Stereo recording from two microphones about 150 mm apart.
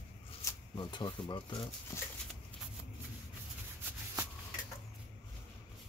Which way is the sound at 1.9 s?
20° left (ahead or behind).